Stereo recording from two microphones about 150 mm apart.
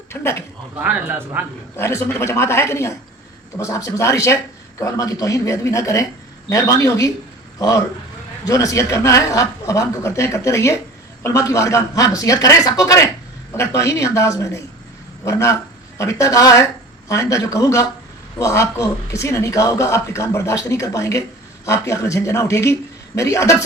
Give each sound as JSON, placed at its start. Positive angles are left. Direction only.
{"t": 0.1, "sound": "a woman's voice", "side_deg": 15}
{"t": 0.8, "sound": "a man's voice", "side_deg": -10}
{"t": 1.7, "sound": "a woman's voice", "side_deg": 20}
{"t": 8.4, "sound": "a man's voice", "side_deg": 20}